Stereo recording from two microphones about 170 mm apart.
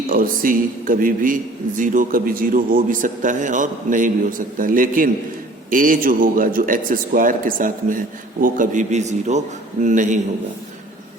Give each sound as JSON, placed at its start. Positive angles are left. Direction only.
{"t": 0.1, "sound": "a man's voice", "side_deg": -55}